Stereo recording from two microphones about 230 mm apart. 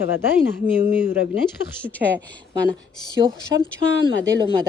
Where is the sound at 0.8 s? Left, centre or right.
Centre.